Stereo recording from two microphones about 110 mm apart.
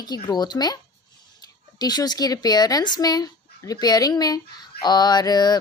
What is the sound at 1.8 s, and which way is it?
Speech, 35° left (ahead or behind).